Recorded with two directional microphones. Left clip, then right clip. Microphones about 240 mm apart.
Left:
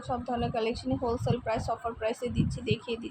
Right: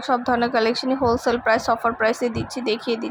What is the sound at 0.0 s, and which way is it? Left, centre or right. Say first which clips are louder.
Speech: right 12 dB; centre.